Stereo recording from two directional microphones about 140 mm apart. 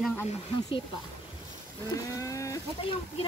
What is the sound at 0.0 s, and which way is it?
Speech, 10° left (ahead or behind).